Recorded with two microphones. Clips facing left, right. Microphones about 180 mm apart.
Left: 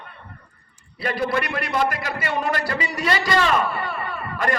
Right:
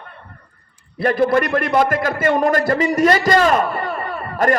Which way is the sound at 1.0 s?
50° right (ahead or behind).